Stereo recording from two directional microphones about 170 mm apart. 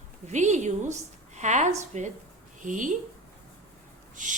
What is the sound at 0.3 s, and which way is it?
Speech, 45° right (ahead or behind).